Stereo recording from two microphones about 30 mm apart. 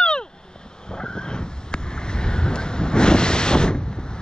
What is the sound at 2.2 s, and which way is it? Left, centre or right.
Wind noise, left.